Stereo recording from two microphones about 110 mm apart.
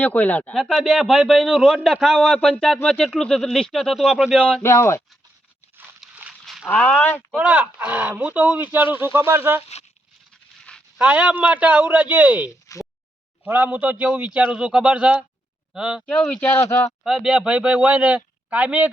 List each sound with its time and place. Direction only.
0.0 s speech: 15° left (ahead or behind)
0.5 s a man's voice: centre (ahead or behind)
4.6 s speech: 25° left (ahead or behind)
5.7 s a sound: 20° right (ahead or behind)
6.4 s a sound: centre (ahead or behind)
6.7 s speech: 15° left (ahead or behind)
7.3 s speech: 15° right (ahead or behind)
10.9 s speech: 10° right (ahead or behind)
12.7 s a sound: 30° left (ahead or behind)
13.4 s a man's voice: 15° right (ahead or behind)
16.0 s speech: 10° left (ahead or behind)
17.0 s speech: 5° right (ahead or behind)